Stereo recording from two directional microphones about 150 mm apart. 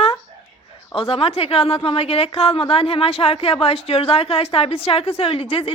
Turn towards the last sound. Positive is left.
turn(degrees=40)  # may be behind; listen again after turning